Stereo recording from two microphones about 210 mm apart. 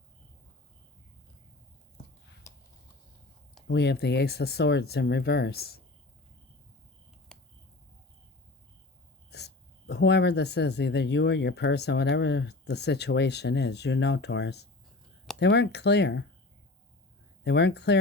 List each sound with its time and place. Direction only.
3.7 s speech: 55° left (ahead or behind)
7.3 s finger snapping: 5° left (ahead or behind)
9.3 s speech: 55° left (ahead or behind)
17.4 s speech: 55° left (ahead or behind)